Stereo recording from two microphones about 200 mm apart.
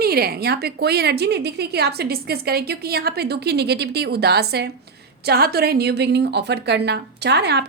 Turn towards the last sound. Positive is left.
turn(degrees=-55)  # may be behind; listen again after turning